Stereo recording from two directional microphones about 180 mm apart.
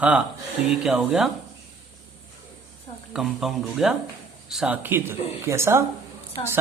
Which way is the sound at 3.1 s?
Centre (ahead or behind).